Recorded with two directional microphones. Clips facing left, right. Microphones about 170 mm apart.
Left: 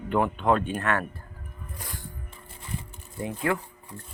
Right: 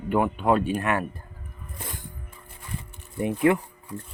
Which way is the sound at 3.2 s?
20° right (ahead or behind).